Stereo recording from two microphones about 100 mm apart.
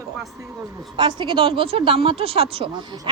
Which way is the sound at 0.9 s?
50° right (ahead or behind).